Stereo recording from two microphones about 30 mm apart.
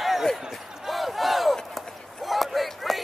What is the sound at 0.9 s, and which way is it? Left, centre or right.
Battle cry, centre.